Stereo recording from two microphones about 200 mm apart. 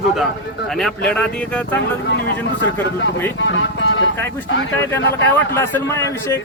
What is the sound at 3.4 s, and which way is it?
Speech, 65° left (ahead or behind).